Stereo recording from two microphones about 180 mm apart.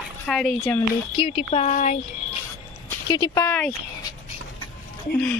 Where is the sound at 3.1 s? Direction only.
25° left (ahead or behind).